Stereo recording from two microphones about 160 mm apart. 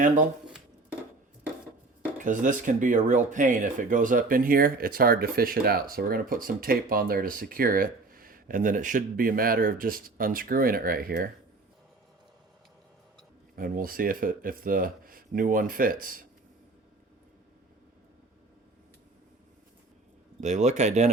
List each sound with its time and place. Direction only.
2.1 s speech: 55° right (ahead or behind)
13.6 s speech: 60° right (ahead or behind)
20.4 s speech: 45° right (ahead or behind)